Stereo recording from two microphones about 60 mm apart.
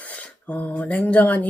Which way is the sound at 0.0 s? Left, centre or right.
Left.